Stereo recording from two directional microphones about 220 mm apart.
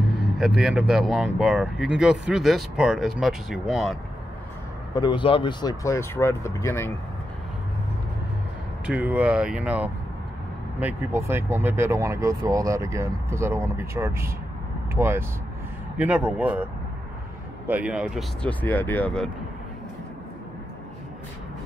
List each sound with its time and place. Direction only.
0.6 s speech: 5° right (ahead or behind)
4.9 s speech: 20° left (ahead or behind)
8.8 s speech: 5° right (ahead or behind)
17.6 s speech: 5° right (ahead or behind)